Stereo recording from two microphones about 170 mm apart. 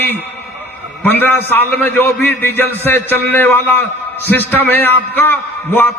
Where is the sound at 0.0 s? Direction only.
10° left (ahead or behind).